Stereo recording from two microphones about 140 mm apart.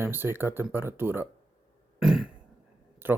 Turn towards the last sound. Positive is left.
turn(degrees=-15)  # may be behind; listen again after turning